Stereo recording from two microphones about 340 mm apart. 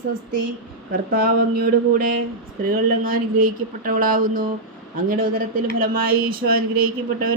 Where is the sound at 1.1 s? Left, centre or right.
Right.